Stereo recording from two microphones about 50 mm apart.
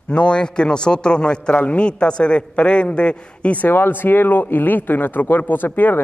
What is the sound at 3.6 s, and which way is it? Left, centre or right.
Speech, left.